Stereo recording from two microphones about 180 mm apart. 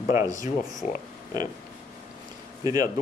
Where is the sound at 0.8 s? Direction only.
35° left (ahead or behind).